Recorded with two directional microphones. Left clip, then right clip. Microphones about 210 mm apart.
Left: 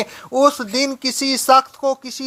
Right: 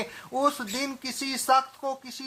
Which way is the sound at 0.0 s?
30° left (ahead or behind).